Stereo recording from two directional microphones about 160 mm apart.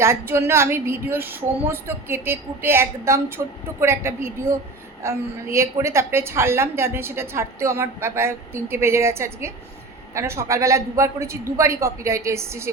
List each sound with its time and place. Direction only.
0.0 s a woman's voice: 15° right (ahead or behind)